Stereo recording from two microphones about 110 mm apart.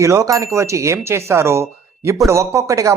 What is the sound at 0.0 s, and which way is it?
Speech, 30° right (ahead or behind).